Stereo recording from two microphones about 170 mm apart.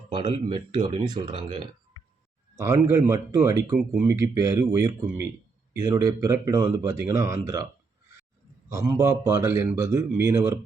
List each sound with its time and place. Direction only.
0.1 s speech: 25° right (ahead or behind)
2.6 s speech: 15° right (ahead or behind)
8.7 s speech: 15° right (ahead or behind)